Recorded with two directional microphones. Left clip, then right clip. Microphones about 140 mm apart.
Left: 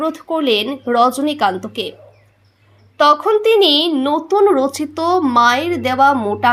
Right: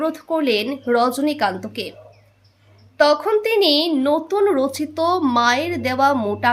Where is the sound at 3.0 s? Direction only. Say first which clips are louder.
Left 4 dB; 15° left (ahead or behind).